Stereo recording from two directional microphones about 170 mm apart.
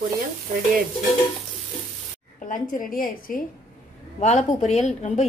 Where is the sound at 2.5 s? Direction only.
55° left (ahead or behind).